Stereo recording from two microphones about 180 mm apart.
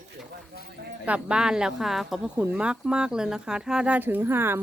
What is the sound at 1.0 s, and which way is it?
Speech, 5° right (ahead or behind).